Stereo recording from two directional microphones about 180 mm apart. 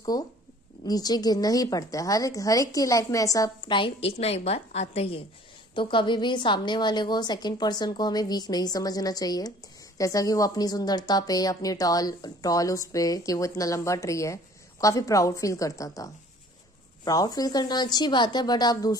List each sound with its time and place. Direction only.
0.8 s a woman's voice: 20° left (ahead or behind)